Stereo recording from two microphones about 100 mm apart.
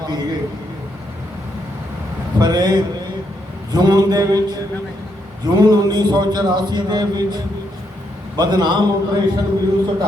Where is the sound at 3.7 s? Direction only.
45° right (ahead or behind).